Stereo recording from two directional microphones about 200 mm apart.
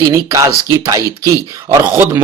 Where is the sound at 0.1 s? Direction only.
15° right (ahead or behind).